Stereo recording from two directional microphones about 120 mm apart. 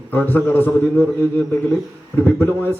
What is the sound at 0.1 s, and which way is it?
Speech, 15° left (ahead or behind).